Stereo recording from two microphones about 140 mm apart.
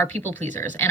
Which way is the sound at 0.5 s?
60° right (ahead or behind).